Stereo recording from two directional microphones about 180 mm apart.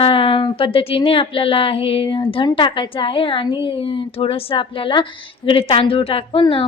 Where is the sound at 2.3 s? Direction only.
30° left (ahead or behind).